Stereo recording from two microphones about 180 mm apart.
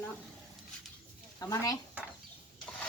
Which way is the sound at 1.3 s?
20° left (ahead or behind).